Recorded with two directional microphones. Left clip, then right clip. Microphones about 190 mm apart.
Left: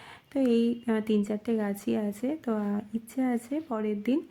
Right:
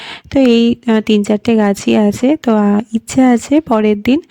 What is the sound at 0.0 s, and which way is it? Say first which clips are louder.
Speech: right 17 dB; 45° right (ahead or behind).